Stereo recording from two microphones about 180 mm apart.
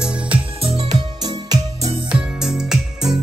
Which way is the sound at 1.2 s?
20° right (ahead or behind).